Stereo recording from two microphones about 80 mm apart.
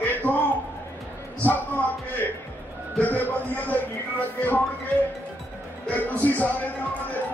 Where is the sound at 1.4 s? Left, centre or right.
Left.